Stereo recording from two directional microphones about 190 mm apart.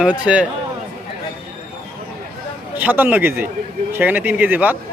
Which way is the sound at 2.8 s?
10° right (ahead or behind).